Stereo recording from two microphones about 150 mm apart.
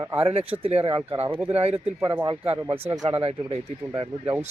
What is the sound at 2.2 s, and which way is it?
Speech, 40° right (ahead or behind).